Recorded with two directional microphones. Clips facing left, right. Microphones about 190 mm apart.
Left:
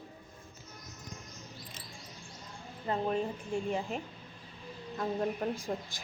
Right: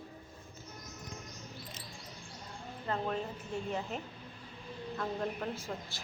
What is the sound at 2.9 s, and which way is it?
Speech, 15° left (ahead or behind).